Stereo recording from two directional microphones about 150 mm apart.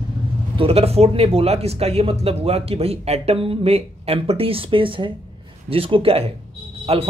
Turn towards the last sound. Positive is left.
turn(degrees=-40)  # may be behind; listen again after turning